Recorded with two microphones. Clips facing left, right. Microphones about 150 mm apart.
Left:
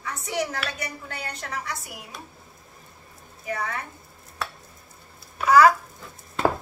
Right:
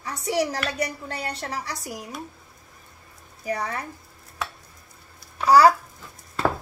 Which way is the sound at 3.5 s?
35° right (ahead or behind).